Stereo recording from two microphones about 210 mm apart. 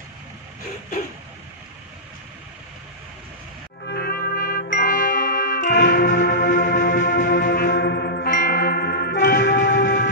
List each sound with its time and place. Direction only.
3.8 s music: 45° left (ahead or behind)